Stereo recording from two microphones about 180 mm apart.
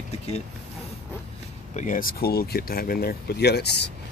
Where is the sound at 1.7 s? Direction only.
45° left (ahead or behind).